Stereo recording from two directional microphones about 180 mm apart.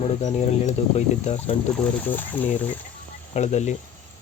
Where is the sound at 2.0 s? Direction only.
10° left (ahead or behind).